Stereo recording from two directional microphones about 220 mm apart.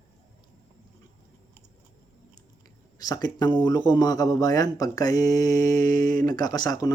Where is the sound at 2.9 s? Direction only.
15° left (ahead or behind).